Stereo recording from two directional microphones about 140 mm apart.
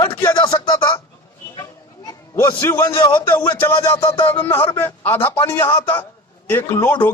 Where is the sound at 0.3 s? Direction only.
30° left (ahead or behind).